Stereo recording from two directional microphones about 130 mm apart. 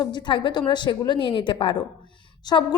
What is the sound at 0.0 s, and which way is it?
A woman's voice, 35° left (ahead or behind).